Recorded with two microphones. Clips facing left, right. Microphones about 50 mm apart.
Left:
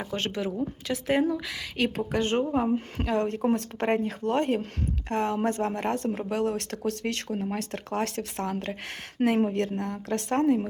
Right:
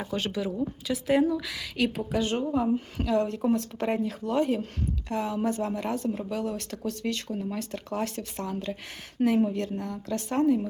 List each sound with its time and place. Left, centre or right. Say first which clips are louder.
0.2 s a woman's voice: even; left
8.4 s speech: left 1 dB; left